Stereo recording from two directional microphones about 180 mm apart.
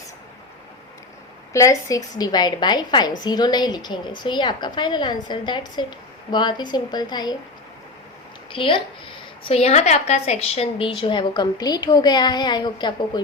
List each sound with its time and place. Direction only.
1.5 s a woman's voice: 15° left (ahead or behind)
8.5 s a woman's voice: 30° left (ahead or behind)